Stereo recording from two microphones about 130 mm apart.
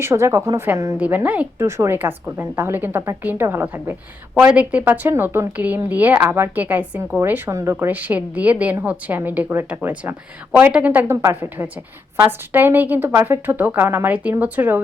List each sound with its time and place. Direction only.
0.0 s a woman's voice: 20° right (ahead or behind)